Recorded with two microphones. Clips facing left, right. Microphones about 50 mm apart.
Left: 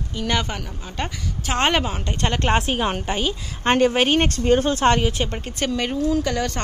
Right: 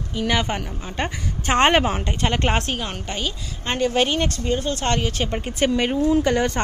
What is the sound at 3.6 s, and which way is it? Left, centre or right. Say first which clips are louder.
Speech: left 5 dB; left.